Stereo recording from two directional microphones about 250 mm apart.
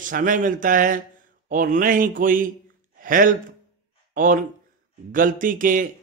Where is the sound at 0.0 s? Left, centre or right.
Right.